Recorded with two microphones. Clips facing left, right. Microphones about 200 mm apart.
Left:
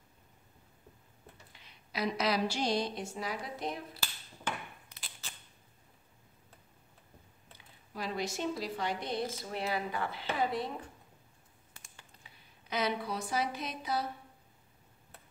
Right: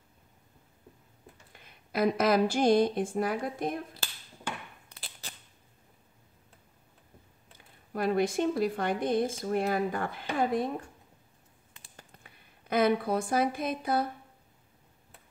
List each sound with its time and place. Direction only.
1.5 s a woman's voice: 50° right (ahead or behind)
7.5 s speech: 55° right (ahead or behind)
12.1 s speech: 55° right (ahead or behind)